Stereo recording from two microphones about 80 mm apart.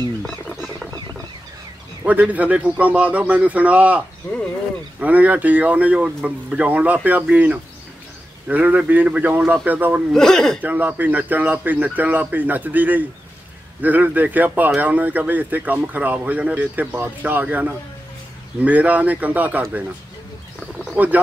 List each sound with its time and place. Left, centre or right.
2.0 s a man's voice: centre
5.0 s speech: centre
10.1 s speech: centre
10.6 s speech: right
20.9 s speech: centre